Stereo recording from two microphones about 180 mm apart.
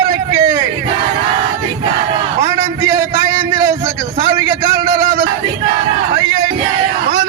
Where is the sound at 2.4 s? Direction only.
15° right (ahead or behind).